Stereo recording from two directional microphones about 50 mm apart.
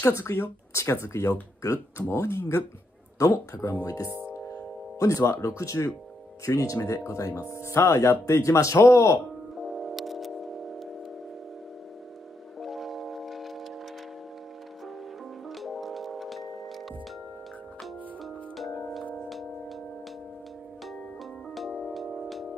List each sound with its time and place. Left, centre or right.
0.3 s speech: left
1.6 s speech: left
3.3 s speech: left
4.9 s speech: left
9.6 s music: centre
12.5 s music: centre
15.4 s music: centre
17.8 s music: centre
21.5 s music: centre